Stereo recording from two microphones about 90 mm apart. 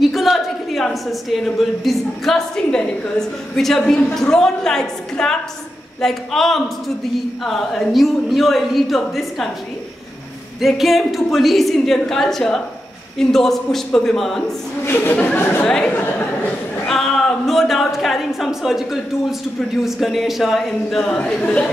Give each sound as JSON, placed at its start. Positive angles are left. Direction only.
{"t": 0.0, "sound": "speech", "side_deg": 0}
{"t": 10.6, "sound": "speech", "side_deg": 0}
{"t": 14.9, "sound": "speech", "side_deg": 25}
{"t": 15.6, "sound": "speech", "side_deg": 10}
{"t": 16.8, "sound": "speech", "side_deg": 5}